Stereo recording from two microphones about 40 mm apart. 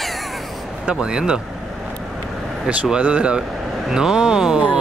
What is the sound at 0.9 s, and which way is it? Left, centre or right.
Speech, centre.